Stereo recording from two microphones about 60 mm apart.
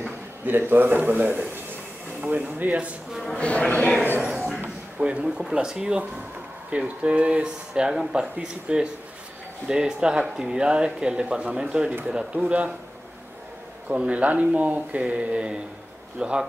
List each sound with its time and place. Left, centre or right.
0.5 s speech: right
3.3 s speech: centre
4.2 s a sound: centre
4.9 s speech: centre
13.8 s speech: right